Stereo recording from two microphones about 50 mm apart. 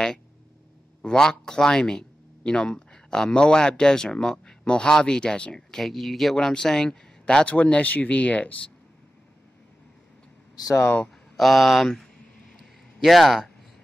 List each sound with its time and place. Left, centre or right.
1.0 s speech: centre
6.3 s speech: centre
11.3 s speech: centre